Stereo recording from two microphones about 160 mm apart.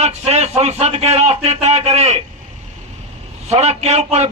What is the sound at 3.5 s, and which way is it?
Speech, 40° right (ahead or behind).